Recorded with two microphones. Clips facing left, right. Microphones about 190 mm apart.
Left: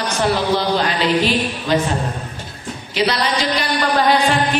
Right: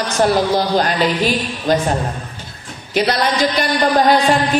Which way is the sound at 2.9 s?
50° right (ahead or behind).